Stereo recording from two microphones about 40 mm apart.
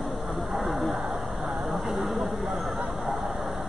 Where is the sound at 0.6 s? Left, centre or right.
Centre.